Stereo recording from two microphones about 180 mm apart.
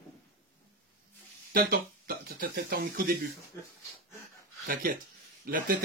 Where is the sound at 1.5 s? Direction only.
55° right (ahead or behind).